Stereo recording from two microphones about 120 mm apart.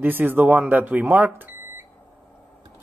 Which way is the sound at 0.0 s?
15° right (ahead or behind).